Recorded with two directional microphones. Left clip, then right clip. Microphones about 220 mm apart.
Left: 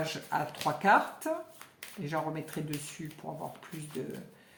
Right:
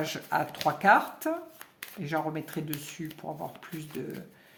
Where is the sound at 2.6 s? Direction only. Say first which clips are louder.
Right 3 dB; 40° right (ahead or behind).